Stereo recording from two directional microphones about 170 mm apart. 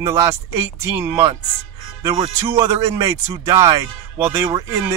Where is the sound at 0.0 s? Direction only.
15° right (ahead or behind).